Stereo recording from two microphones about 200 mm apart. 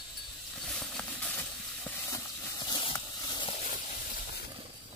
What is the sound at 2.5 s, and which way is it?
Clip-clop, 20° left (ahead or behind).